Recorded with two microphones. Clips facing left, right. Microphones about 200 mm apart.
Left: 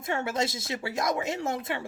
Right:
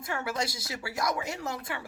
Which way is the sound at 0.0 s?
25° left (ahead or behind).